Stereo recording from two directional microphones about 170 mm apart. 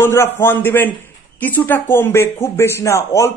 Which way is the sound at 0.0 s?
15° left (ahead or behind).